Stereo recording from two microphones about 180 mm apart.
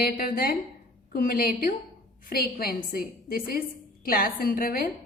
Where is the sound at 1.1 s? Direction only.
55° left (ahead or behind).